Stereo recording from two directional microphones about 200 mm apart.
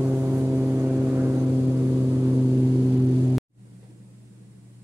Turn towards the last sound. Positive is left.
turn(degrees=-10)  # may be behind; listen again after turning